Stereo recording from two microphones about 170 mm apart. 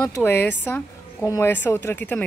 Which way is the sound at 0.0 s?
10° left (ahead or behind).